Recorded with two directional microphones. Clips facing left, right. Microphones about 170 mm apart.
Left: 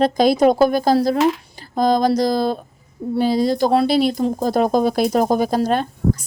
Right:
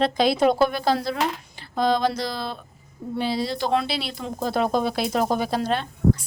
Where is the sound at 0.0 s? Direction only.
45° left (ahead or behind).